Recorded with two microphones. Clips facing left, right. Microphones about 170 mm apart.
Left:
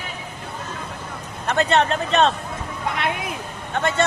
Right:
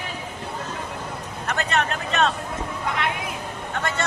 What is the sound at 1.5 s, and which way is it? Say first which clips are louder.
Speech: left 6 dB; 30° left (ahead or behind).